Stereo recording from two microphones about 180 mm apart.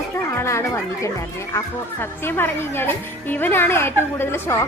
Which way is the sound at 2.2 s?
10° left (ahead or behind).